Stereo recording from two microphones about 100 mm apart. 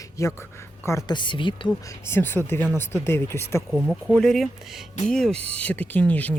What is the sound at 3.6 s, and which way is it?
Speech, 5° left (ahead or behind).